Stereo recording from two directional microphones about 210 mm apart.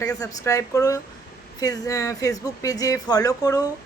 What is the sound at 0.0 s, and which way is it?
A woman's voice, 15° left (ahead or behind).